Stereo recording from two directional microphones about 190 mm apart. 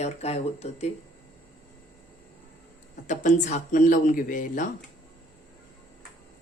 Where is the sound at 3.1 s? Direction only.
40° left (ahead or behind).